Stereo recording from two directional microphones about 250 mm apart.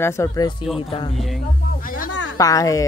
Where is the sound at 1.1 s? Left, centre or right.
Centre.